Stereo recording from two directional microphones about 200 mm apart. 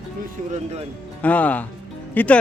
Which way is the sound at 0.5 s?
30° right (ahead or behind).